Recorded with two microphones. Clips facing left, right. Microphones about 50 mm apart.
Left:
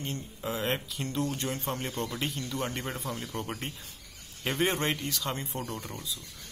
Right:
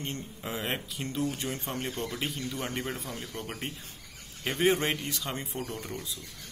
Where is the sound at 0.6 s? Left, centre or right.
Centre.